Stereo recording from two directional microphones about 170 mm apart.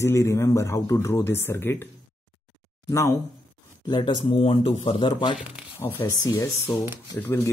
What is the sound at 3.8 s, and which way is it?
Speech, 30° left (ahead or behind).